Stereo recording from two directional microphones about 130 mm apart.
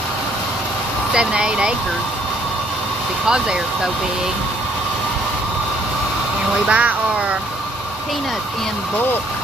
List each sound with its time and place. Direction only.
1.1 s speech: 5° right (ahead or behind)
3.2 s speech: 5° right (ahead or behind)
6.7 s speech: 10° right (ahead or behind)